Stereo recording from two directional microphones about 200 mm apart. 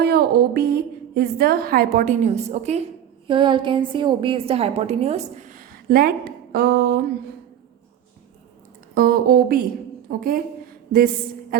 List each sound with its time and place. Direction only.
0.0 s a woman's voice: 50° right (ahead or behind)
9.0 s speech: 50° right (ahead or behind)